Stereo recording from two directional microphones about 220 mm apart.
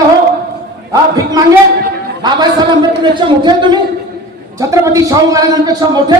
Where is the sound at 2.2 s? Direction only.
20° right (ahead or behind).